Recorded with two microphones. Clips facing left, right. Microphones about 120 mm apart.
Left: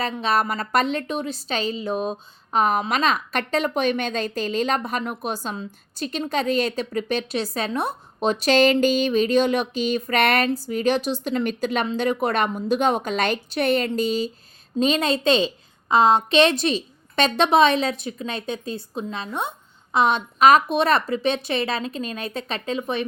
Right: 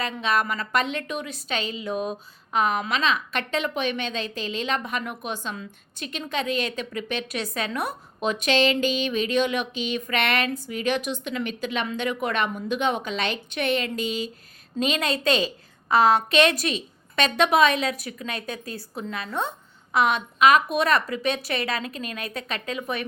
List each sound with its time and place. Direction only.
0.0 s a woman's voice: 35° left (ahead or behind)